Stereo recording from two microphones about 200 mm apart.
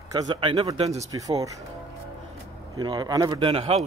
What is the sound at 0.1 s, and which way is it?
A man's voice, 20° right (ahead or behind).